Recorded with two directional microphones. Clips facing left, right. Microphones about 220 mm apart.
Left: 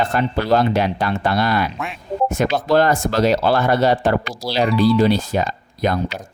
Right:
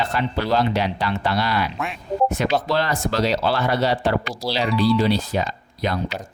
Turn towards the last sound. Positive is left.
turn(degrees=50)  # may be behind; listen again after turning